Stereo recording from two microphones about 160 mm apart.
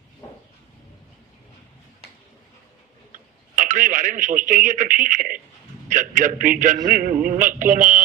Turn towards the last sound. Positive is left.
turn(degrees=-55)  # may be behind; listen again after turning